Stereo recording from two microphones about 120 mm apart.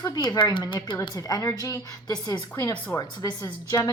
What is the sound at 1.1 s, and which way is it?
A woman's voice, 30° left (ahead or behind).